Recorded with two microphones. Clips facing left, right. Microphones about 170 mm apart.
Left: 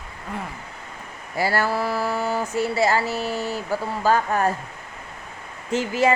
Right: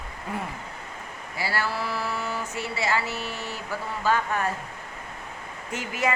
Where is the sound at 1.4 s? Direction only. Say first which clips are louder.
Left 7 dB; 45° left (ahead or behind).